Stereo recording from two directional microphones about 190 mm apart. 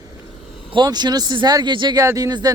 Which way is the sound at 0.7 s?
20° right (ahead or behind).